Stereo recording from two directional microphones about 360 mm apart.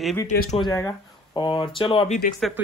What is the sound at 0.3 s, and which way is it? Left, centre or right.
Speech, left.